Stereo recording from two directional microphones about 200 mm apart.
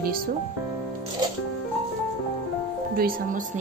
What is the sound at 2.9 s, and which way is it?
Speech, 50° right (ahead or behind).